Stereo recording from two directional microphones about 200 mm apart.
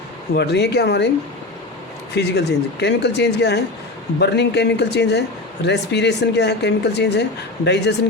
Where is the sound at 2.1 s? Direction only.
55° left (ahead or behind).